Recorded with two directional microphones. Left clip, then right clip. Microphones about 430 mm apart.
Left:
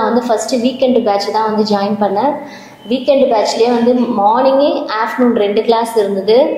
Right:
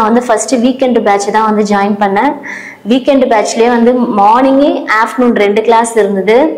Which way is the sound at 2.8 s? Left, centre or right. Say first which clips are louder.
Right 2 dB; right.